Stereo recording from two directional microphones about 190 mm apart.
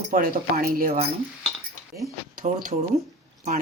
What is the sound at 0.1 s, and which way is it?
Speech, 50° right (ahead or behind).